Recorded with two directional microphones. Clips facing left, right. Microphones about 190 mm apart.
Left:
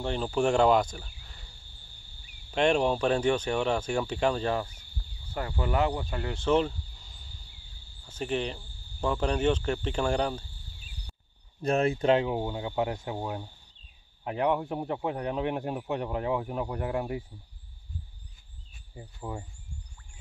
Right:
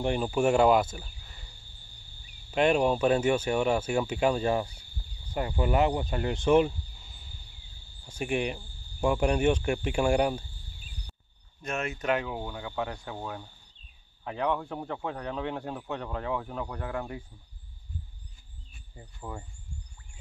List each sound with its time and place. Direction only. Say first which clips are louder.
0.0 s speech: right 1 dB; 10° right (ahead or behind)
2.5 s speech: right 1 dB; 5° right (ahead or behind)
11.6 s speech: left 7 dB; 35° left (ahead or behind); by 17.2 s 15° left (ahead or behind)
18.9 s speech: left 4 dB; 15° left (ahead or behind)